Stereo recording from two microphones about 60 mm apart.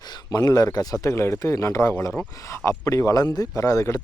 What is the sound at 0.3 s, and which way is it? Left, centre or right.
Speech, left.